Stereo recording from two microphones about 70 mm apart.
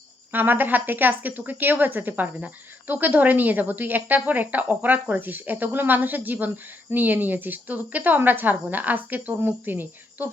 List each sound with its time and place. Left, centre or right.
0.3 s a woman's voice: right